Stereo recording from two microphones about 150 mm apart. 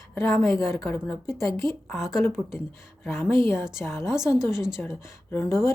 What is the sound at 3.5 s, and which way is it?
Speech, 5° right (ahead or behind).